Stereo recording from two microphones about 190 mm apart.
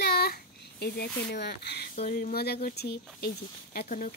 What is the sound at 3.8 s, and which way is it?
Speech, 45° left (ahead or behind).